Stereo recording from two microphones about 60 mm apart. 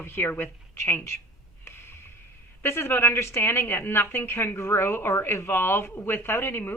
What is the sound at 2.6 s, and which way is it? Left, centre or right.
A woman's voice, left.